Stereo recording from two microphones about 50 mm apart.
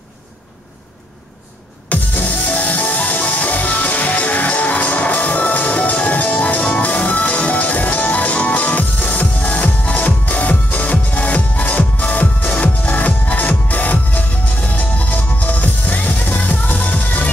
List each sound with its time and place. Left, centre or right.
1.9 s music: left